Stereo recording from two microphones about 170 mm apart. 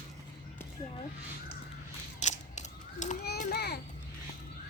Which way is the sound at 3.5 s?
70° left (ahead or behind).